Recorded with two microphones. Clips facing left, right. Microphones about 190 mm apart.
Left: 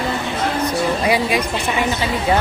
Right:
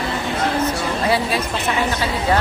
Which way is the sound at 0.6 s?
15° left (ahead or behind).